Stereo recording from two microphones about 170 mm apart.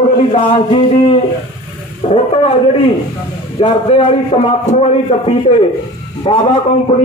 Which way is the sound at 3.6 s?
35° left (ahead or behind).